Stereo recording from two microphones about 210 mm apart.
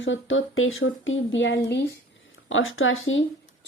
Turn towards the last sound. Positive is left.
turn(degrees=70)  # may be behind; listen again after turning